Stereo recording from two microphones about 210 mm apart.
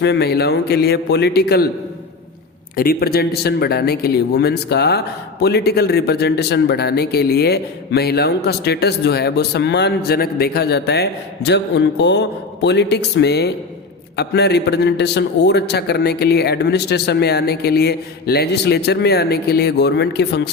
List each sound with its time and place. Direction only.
0.0 s speech: 55° left (ahead or behind)
2.7 s speech: 45° left (ahead or behind)